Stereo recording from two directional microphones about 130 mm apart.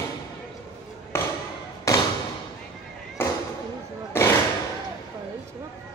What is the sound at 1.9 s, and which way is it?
Thump, 25° left (ahead or behind).